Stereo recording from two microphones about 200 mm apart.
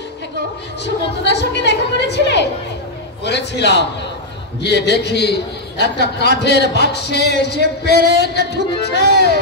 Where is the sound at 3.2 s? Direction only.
60° left (ahead or behind).